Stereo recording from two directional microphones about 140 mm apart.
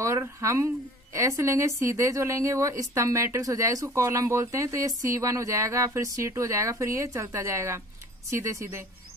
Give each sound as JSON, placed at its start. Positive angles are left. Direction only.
{"t": 0.0, "sound": "speech", "side_deg": -20}